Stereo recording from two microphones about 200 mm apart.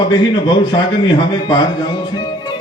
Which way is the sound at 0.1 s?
20° left (ahead or behind).